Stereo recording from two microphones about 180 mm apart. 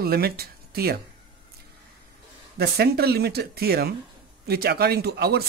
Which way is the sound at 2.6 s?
60° right (ahead or behind).